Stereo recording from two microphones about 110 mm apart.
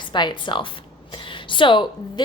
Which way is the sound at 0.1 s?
45° left (ahead or behind).